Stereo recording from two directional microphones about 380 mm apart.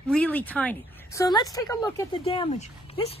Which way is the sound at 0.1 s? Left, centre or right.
Centre.